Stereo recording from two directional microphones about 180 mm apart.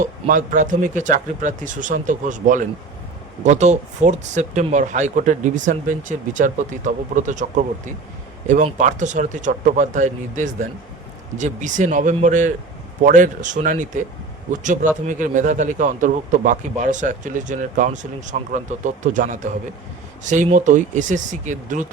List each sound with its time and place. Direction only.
0.0 s speech: 45° right (ahead or behind)
8.4 s speech: 45° right (ahead or behind)